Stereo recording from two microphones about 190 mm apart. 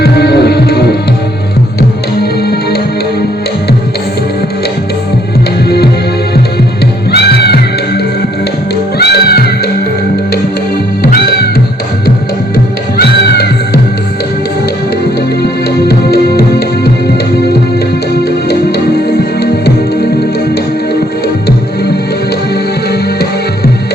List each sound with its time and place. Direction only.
0.0 s music: 60° left (ahead or behind)
5.6 s music: 55° left (ahead or behind)
7.1 s music: 55° left (ahead or behind)
11.0 s music: 55° left (ahead or behind)
13.0 s music: 55° left (ahead or behind)
15.9 s music: 55° left (ahead or behind)
19.4 s music: 55° left (ahead or behind)